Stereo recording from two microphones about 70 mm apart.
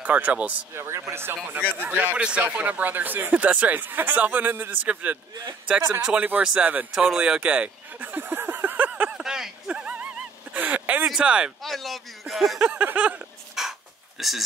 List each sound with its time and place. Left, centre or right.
0.0 s speech: right
0.7 s speech: right
1.8 s speech: right
6.9 s a sound: centre
9.2 s a sound: centre; by 11.1 s right
11.1 s speech: centre
11.6 s speech: centre
12.7 s speech: right
13.6 s a sound: centre